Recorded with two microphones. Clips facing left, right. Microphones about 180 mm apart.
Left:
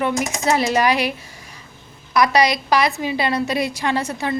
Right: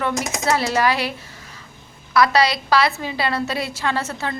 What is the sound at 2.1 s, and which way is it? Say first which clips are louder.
A woman's voice: left 1 dB; 15° left (ahead or behind).